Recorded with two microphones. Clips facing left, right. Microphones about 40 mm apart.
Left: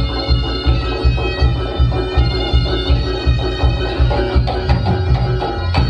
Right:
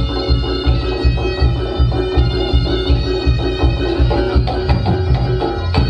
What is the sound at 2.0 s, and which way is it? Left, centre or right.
Music, centre.